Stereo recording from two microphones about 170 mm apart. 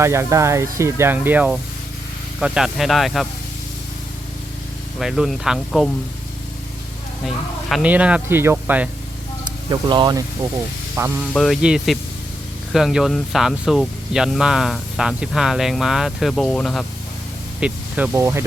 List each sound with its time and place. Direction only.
0.0 s speech: 15° right (ahead or behind); by 3.2 s centre (ahead or behind)
4.9 s speech: centre (ahead or behind)
7.7 s speech: 5° right (ahead or behind)
9.4 s speech: 25° right (ahead or behind)
11.2 s speech: centre (ahead or behind)
17.6 s speech: 10° right (ahead or behind)